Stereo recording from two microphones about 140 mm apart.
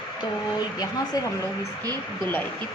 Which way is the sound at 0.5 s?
30° left (ahead or behind).